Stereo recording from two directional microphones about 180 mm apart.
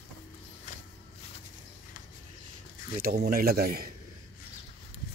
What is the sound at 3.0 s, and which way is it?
Speech, 55° right (ahead or behind).